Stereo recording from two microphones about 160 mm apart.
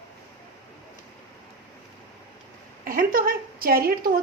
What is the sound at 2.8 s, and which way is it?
A woman's voice, 60° right (ahead or behind).